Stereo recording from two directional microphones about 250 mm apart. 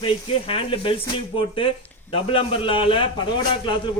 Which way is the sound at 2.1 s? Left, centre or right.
Left.